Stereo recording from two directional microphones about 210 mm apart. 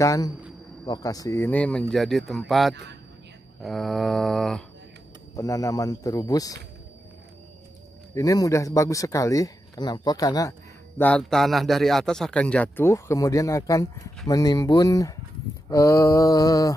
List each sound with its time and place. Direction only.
0.0 s a man's voice: 15° left (ahead or behind)
5.3 s a man's voice: 15° left (ahead or behind)
8.1 s a man's voice: 15° left (ahead or behind)
11.0 s a man's voice: 5° left (ahead or behind)